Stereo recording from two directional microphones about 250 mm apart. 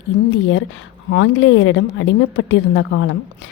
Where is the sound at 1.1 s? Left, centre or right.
Left.